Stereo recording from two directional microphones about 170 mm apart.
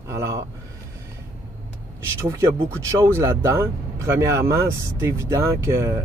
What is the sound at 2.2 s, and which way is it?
Speech, 20° right (ahead or behind).